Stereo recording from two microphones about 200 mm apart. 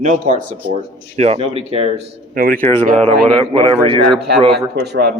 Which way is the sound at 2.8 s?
30° right (ahead or behind).